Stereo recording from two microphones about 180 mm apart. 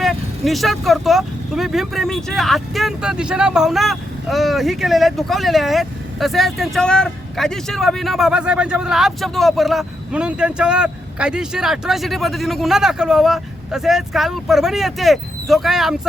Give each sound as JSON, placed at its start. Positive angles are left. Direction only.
{"t": 0.0, "sound": "speech", "side_deg": 0}